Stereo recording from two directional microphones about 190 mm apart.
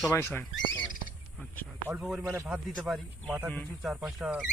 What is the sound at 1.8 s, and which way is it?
A man's voice, 5° right (ahead or behind).